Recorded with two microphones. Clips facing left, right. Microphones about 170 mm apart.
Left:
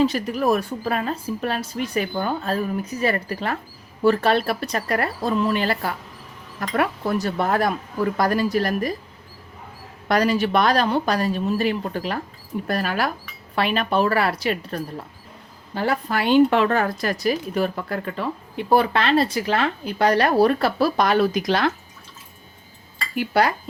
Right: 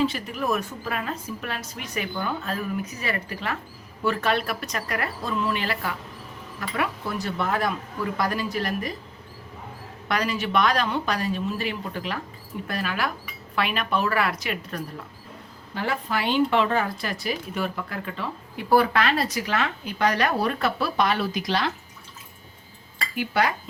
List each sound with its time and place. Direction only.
0.0 s a woman's voice: 40° left (ahead or behind)
10.1 s a woman's voice: 40° left (ahead or behind)
18.5 s a woman's voice: 25° left (ahead or behind); by 21.7 s 50° left (ahead or behind)
23.1 s a woman's voice: 35° left (ahead or behind)